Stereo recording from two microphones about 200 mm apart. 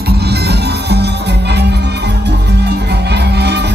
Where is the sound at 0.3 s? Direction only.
55° right (ahead or behind).